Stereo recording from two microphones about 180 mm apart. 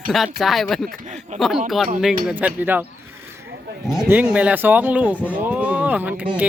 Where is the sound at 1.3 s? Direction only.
45° right (ahead or behind).